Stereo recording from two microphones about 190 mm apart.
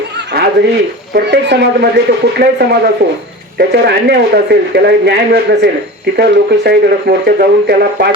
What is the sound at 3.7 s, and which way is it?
A man's voice, 55° right (ahead or behind).